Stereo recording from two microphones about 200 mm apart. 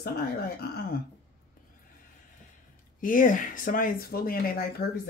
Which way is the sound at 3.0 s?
40° left (ahead or behind).